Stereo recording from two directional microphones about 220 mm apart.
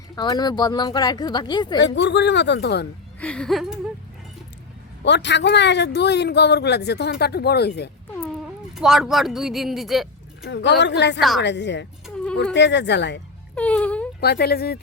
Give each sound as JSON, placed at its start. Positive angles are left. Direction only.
{"t": 0.2, "sound": "speech", "side_deg": 20}
{"t": 1.8, "sound": "speech", "side_deg": 55}
{"t": 3.2, "sound": "speech", "side_deg": 5}
{"t": 5.0, "sound": "speech", "side_deg": 50}
{"t": 8.7, "sound": "speech", "side_deg": 0}
{"t": 10.4, "sound": "speech", "side_deg": 55}
{"t": 12.0, "sound": "a sound", "side_deg": 5}
{"t": 12.5, "sound": "speech", "side_deg": 55}
{"t": 13.6, "sound": "speech", "side_deg": 5}
{"t": 14.2, "sound": "speech", "side_deg": 45}